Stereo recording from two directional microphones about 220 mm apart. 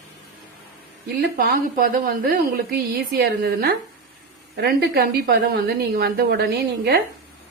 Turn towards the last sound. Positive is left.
turn(degrees=-45)  # may be behind; listen again after turning